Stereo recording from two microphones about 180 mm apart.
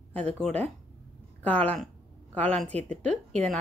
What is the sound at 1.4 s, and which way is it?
A woman's voice, 5° left (ahead or behind).